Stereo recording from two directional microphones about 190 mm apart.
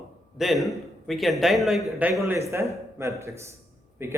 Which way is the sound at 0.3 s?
Centre (ahead or behind).